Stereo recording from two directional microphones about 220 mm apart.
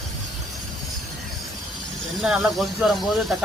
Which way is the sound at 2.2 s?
Centre (ahead or behind).